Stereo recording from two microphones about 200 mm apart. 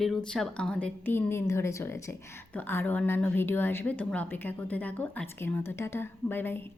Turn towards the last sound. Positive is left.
turn(degrees=10)  # may be behind; listen again after turning